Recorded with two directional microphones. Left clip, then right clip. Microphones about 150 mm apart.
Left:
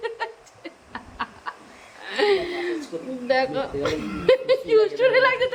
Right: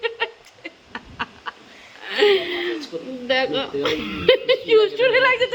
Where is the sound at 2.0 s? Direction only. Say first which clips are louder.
Right 4 dB; 20° right (ahead or behind).